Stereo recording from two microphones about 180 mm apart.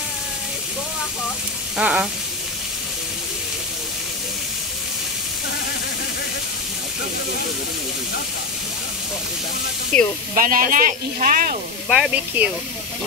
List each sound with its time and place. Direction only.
1.8 s speech: 5° right (ahead or behind)
9.9 s speech: 5° left (ahead or behind)
10.3 s speech: 50° right (ahead or behind)
11.9 s speech: 5° right (ahead or behind)